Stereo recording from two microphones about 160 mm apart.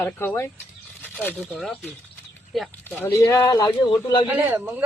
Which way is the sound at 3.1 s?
20° left (ahead or behind).